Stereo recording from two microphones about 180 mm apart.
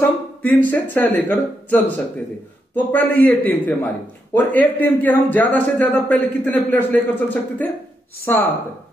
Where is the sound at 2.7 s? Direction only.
10° left (ahead or behind).